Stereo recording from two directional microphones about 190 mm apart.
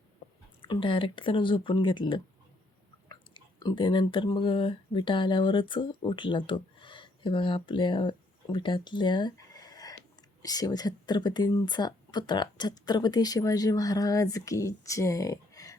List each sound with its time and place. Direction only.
0.6 s speech: 25° left (ahead or behind)